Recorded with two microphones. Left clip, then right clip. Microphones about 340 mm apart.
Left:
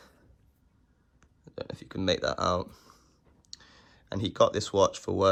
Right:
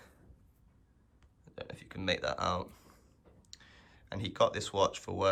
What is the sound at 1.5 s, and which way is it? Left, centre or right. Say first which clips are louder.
Speech: left 7 dB; centre.